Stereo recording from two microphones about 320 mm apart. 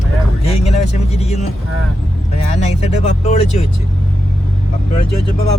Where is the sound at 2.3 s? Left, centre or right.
Centre.